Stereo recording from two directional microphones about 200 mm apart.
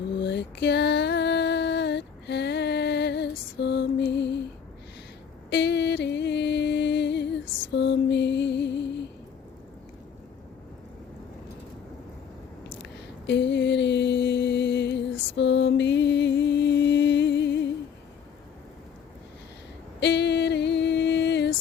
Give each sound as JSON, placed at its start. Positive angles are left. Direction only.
{"t": 0.2, "sound": "female singing", "side_deg": 60}
{"t": 5.5, "sound": "music", "side_deg": 55}
{"t": 13.2, "sound": "mantra", "side_deg": 60}
{"t": 20.0, "sound": "a sound", "side_deg": 60}